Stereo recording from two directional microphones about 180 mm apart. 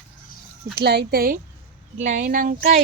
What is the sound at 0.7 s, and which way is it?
Speech, 65° right (ahead or behind).